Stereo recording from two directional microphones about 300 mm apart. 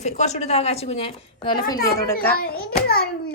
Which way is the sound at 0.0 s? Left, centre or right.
Left.